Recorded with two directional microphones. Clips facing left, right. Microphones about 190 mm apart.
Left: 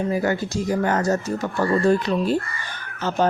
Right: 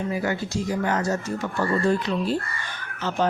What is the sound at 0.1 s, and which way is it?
Speech, 45° left (ahead or behind).